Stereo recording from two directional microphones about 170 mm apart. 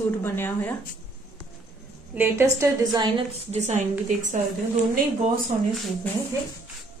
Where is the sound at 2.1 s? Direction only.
10° right (ahead or behind).